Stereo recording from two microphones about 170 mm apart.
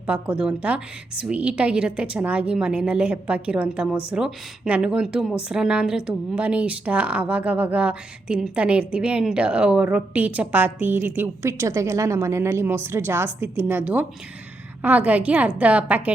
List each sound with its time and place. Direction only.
0.1 s speech: 5° right (ahead or behind)